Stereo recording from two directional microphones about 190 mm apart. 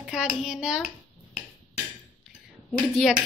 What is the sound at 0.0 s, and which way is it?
Speech, 5° right (ahead or behind).